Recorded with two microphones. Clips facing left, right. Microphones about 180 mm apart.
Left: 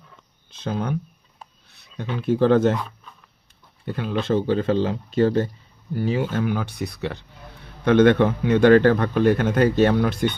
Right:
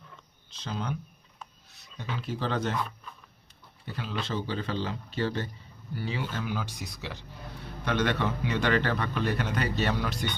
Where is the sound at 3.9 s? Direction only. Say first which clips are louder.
Left 11 dB; 55° left (ahead or behind).